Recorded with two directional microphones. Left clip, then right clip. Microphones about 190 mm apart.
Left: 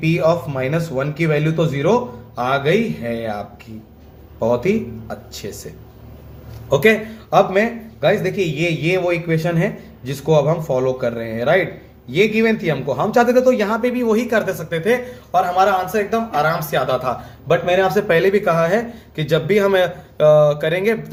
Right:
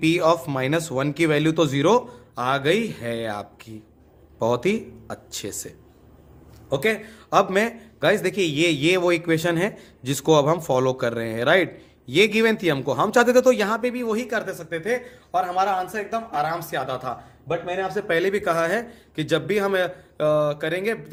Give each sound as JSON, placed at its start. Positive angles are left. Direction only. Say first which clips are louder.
{"t": 0.0, "sound": "speech", "louder": "left 2 dB", "side_deg": -45}
{"t": 6.7, "sound": "a man's voice", "louder": "left 9 dB", "side_deg": -25}
{"t": 17.5, "sound": "a man's voice", "louder": "left 10 dB", "side_deg": -5}
{"t": 18.1, "sound": "speech", "louder": "left 3 dB", "side_deg": -25}